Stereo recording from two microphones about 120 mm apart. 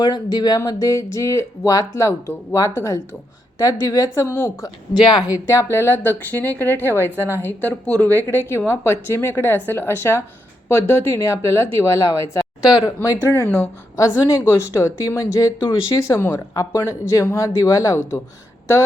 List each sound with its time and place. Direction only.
0.0 s a woman's voice: 35° left (ahead or behind)